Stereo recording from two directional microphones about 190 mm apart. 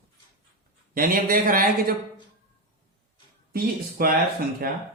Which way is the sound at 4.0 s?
50° right (ahead or behind).